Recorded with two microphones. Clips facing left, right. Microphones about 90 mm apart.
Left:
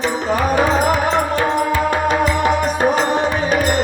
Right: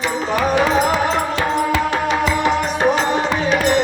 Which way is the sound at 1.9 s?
50° left (ahead or behind).